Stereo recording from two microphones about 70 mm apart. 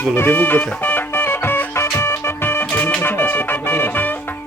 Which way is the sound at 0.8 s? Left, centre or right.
Left.